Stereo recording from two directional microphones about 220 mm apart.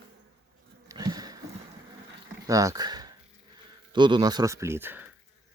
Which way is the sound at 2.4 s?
15° right (ahead or behind).